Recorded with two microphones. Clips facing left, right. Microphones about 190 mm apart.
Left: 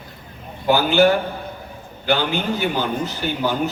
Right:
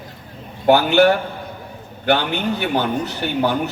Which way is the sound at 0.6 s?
65° right (ahead or behind).